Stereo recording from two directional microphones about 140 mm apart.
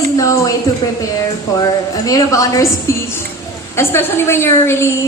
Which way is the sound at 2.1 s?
25° left (ahead or behind).